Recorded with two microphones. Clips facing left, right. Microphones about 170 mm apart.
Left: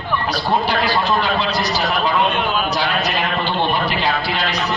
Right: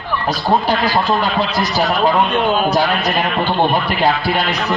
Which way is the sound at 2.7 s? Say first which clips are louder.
Right 4 dB; 50° right (ahead or behind).